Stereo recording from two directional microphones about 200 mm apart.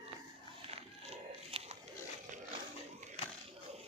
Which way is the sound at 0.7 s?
30° right (ahead or behind).